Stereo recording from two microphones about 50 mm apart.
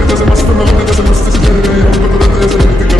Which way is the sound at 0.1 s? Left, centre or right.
Centre.